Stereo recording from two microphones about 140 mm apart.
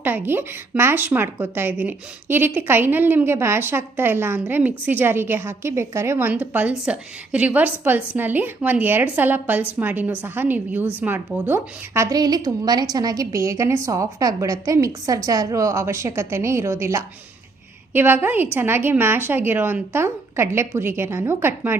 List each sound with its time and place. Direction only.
0.0 s a woman's voice: 15° right (ahead or behind)